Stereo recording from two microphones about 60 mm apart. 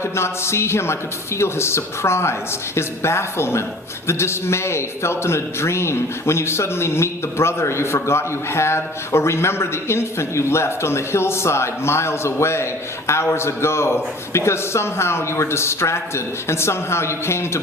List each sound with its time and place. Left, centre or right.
0.0 s a man's voice: left